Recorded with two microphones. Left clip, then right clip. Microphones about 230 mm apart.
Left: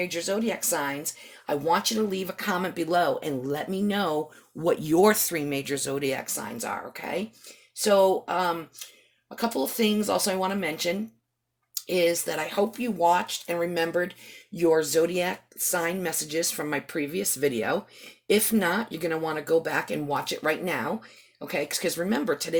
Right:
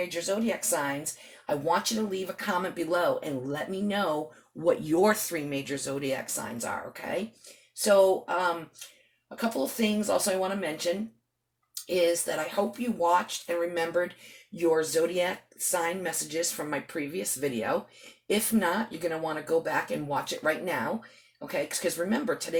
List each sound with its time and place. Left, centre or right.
0.1 s speech: left